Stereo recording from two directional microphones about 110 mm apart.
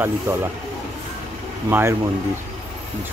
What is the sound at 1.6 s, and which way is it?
Speech, 20° right (ahead or behind).